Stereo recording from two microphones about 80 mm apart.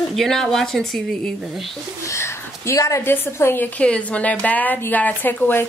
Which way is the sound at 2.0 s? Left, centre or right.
Left.